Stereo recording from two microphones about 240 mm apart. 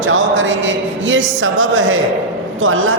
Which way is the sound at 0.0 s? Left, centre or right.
Right.